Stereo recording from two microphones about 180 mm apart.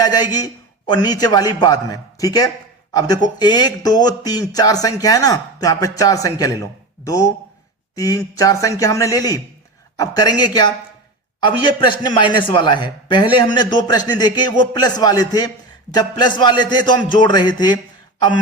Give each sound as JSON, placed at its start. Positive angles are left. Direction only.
{"t": 0.0, "sound": "a man's voice", "side_deg": 20}